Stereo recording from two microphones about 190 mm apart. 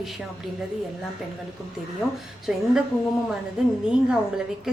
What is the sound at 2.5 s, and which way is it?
Speech, centre (ahead or behind).